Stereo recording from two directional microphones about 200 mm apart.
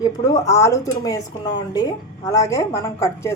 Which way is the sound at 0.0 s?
15° left (ahead or behind).